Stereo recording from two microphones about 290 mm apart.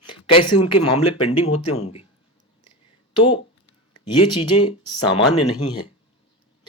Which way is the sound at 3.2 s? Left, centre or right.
Centre.